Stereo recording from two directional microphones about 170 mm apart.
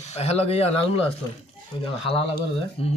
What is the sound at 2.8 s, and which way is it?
Speech, 35° left (ahead or behind).